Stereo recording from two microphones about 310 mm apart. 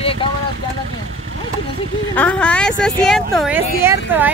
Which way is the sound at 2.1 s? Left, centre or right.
Centre.